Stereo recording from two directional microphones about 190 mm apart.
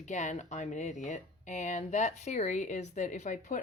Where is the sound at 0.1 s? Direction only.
40° left (ahead or behind).